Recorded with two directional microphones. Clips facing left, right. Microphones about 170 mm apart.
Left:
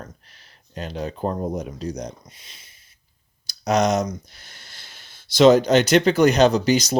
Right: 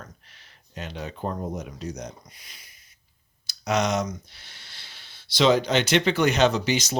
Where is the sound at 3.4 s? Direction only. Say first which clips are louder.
Left 5 dB; 40° left (ahead or behind).